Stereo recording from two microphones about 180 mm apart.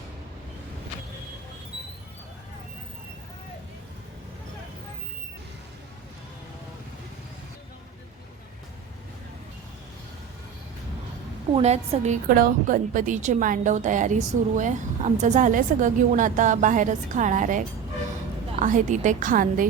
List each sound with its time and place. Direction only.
11.5 s a woman's voice: 35° right (ahead or behind)
18.6 s a woman's voice: 45° right (ahead or behind)